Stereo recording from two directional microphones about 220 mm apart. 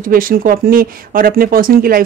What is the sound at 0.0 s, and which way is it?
Speech, 40° right (ahead or behind).